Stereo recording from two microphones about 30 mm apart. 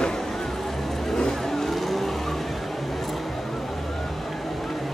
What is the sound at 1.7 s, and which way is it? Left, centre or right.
Vehicle, centre.